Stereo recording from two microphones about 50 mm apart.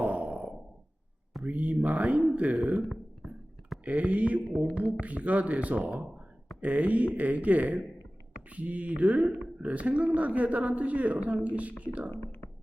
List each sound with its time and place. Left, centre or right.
0.0 s sigh: right
1.5 s speech: right
3.2 s whispering: centre
3.8 s speech: right